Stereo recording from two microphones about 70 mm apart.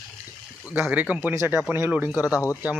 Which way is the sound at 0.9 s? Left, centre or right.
Right.